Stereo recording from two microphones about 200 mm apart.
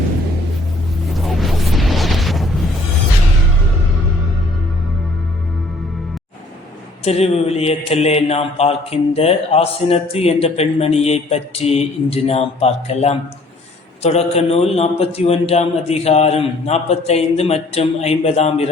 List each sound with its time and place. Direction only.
1.1 s music: centre (ahead or behind)
7.0 s speech: 30° left (ahead or behind)